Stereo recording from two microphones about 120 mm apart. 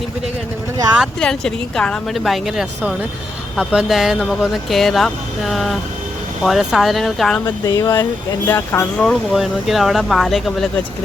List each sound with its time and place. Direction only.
1.2 s speech: 5° left (ahead or behind)
7.4 s speech: 30° left (ahead or behind)
9.0 s speech: centre (ahead or behind)